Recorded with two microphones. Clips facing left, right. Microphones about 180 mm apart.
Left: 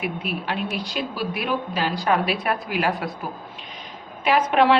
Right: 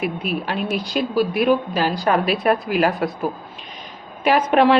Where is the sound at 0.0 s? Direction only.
40° right (ahead or behind).